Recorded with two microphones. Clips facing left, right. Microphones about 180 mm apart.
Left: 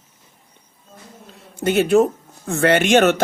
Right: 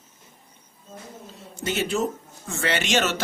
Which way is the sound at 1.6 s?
55° left (ahead or behind).